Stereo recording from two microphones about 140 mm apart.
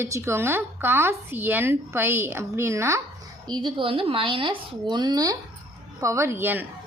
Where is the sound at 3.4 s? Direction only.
30° right (ahead or behind).